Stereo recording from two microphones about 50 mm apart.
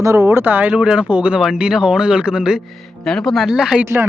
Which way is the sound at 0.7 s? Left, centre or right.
Right.